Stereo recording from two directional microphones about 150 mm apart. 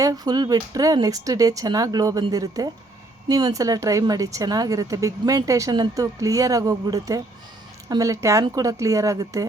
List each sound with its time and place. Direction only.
0.0 s a woman's voice: 25° right (ahead or behind)